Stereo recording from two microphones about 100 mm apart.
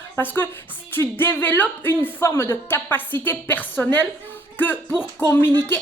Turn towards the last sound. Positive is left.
turn(degrees=20)  # may be behind; listen again after turning